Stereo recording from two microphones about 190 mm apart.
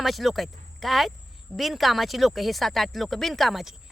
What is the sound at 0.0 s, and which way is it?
Speech, centre (ahead or behind).